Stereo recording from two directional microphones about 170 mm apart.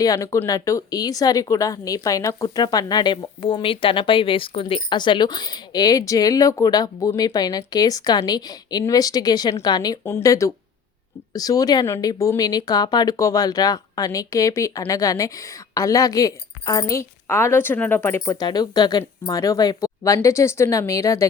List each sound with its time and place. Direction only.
0.0 s speech: 20° left (ahead or behind)
10.0 s speech: 15° left (ahead or behind)